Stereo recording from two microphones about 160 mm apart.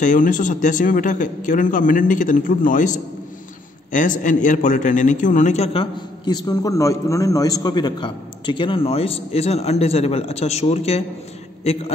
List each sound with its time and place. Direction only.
0.0 s a man's voice: 55° left (ahead or behind)